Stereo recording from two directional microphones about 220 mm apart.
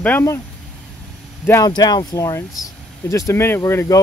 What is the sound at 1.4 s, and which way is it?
Speech, 10° left (ahead or behind).